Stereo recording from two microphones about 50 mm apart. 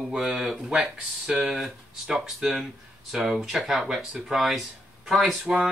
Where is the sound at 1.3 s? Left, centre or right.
Centre.